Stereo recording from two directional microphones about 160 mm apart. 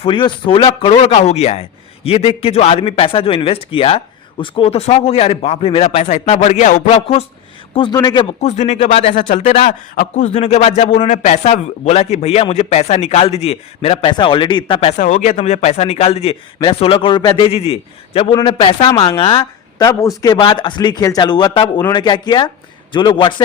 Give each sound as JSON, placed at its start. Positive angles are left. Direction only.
{"t": 0.0, "sound": "a man's voice", "side_deg": 30}
{"t": 7.7, "sound": "speech", "side_deg": 30}
{"t": 8.4, "sound": "speech", "side_deg": 45}
{"t": 9.1, "sound": "speech", "side_deg": 55}
{"t": 15.0, "sound": "a man's voice", "side_deg": 50}
{"t": 19.8, "sound": "a man's voice", "side_deg": 20}